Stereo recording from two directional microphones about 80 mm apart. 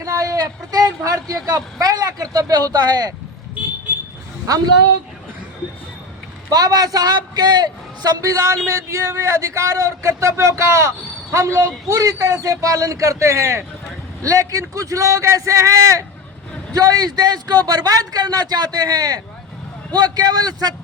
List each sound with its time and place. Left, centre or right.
0.0 s a sound: right
1.5 s a man's voice: right
6.5 s speech: right
8.2 s a man's voice: right
16.7 s speech: right